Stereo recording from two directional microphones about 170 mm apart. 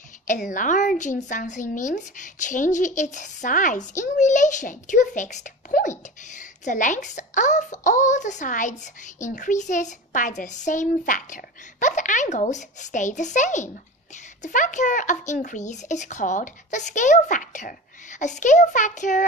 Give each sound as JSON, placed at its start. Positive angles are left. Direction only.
{"t": 0.3, "sound": "speech", "side_deg": 45}